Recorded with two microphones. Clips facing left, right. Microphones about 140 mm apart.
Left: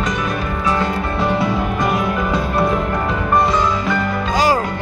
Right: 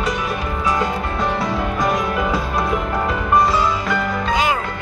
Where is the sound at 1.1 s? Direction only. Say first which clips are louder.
Left 3 dB; centre (ahead or behind).